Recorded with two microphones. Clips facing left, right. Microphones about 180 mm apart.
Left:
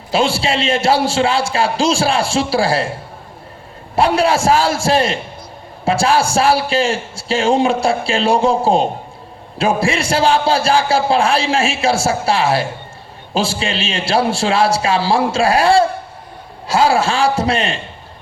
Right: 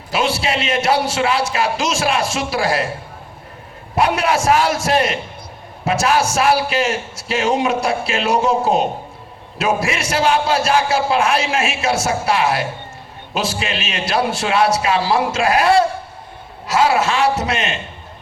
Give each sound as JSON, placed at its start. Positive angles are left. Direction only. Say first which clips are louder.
{"t": 0.1, "sound": "a man's voice", "louder": "left 3 dB", "side_deg": 30}
{"t": 3.9, "sound": "a man's voice", "louder": "left 3 dB", "side_deg": 30}